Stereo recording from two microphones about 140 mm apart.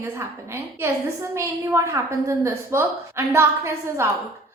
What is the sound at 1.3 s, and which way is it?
A woman's voice, 15° right (ahead or behind).